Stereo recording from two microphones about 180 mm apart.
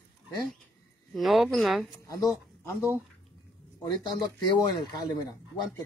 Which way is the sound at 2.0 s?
20° left (ahead or behind).